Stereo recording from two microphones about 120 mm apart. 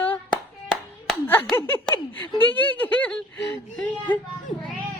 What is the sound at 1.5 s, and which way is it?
Speech, 20° left (ahead or behind).